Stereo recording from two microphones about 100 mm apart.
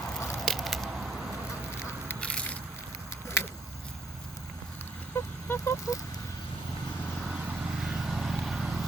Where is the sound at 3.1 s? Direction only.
25° left (ahead or behind).